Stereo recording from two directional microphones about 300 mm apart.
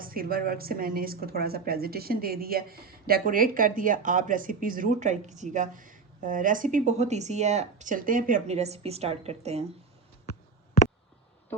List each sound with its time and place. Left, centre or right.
0.0 s a woman's voice: right